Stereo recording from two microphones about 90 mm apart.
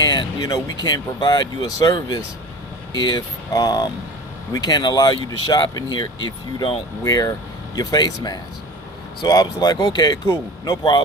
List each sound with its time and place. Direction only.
0.0 s speech: 50° left (ahead or behind)
7.0 s a man's voice: 40° left (ahead or behind); by 11.0 s 60° left (ahead or behind)